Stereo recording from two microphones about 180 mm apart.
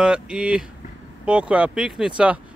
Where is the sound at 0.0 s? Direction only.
5° right (ahead or behind).